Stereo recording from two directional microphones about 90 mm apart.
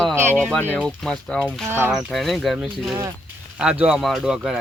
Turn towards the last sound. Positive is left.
turn(degrees=-5)  # may be behind; listen again after turning